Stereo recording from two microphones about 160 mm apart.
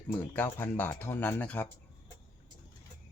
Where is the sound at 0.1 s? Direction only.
15° left (ahead or behind).